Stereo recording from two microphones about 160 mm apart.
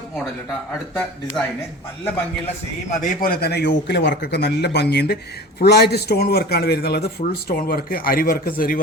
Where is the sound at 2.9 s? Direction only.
60° left (ahead or behind).